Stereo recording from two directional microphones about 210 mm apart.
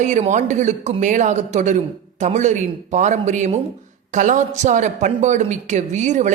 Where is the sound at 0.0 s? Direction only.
35° right (ahead or behind).